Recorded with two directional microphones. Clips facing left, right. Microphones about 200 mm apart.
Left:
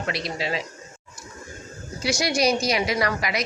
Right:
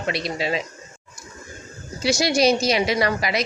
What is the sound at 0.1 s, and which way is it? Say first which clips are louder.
Speech: right 4 dB; 25° right (ahead or behind).